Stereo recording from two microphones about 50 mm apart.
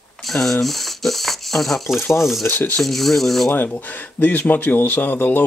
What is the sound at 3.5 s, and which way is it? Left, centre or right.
Speech, left.